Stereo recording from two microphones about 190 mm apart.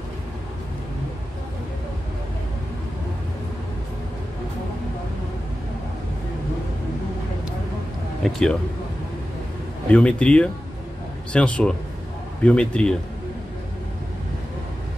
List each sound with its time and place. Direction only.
8.2 s a man's voice: centre (ahead or behind)
9.8 s speech: 5° left (ahead or behind)